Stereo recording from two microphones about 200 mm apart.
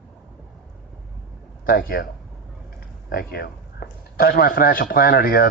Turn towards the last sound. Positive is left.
turn(degrees=50)  # may be behind; listen again after turning